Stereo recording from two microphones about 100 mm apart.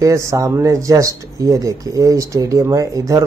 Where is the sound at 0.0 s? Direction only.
30° right (ahead or behind).